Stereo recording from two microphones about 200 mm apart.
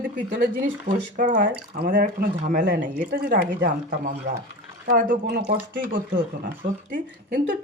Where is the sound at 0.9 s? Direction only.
40° right (ahead or behind).